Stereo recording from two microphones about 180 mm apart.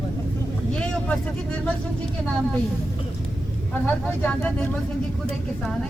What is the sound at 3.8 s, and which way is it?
Speech, 5° left (ahead or behind).